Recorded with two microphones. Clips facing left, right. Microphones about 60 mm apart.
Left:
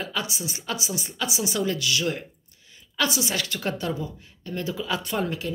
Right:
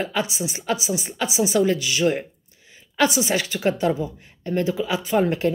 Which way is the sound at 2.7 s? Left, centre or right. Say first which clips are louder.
Right 6 dB; right.